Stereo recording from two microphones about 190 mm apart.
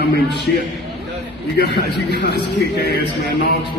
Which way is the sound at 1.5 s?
65° left (ahead or behind).